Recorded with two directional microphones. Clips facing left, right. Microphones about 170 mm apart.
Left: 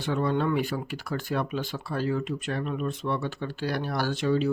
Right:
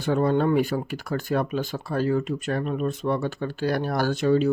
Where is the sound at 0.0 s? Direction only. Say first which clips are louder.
Right 5 dB; 45° right (ahead or behind).